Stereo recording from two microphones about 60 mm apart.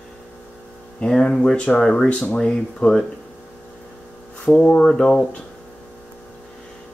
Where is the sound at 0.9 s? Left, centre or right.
Centre.